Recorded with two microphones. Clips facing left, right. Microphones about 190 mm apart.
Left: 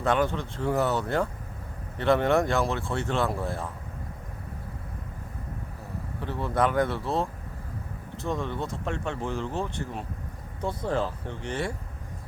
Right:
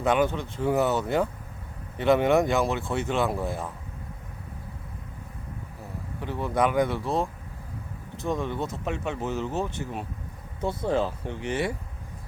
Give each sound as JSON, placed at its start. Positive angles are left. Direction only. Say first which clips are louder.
{"t": 0.0, "sound": "speech", "louder": "right 2 dB", "side_deg": -15}
{"t": 6.2, "sound": "speech", "louder": "right 1 dB", "side_deg": -15}